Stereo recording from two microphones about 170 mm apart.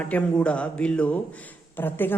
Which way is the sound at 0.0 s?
10° left (ahead or behind).